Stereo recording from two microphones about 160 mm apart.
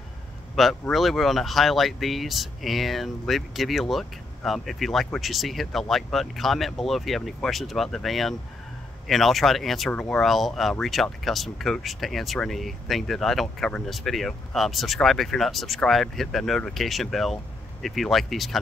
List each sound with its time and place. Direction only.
0.6 s speech: centre (ahead or behind)